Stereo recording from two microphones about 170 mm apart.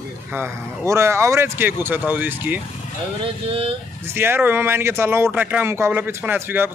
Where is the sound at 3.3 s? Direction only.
30° right (ahead or behind).